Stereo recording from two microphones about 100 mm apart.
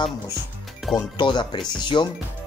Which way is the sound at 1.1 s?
50° left (ahead or behind).